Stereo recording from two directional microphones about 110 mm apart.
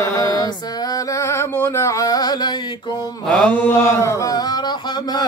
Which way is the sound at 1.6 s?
30° left (ahead or behind).